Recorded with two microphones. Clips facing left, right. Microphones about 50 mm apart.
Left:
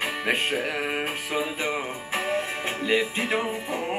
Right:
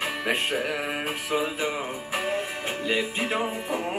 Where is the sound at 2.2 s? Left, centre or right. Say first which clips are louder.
Left 2 dB; centre.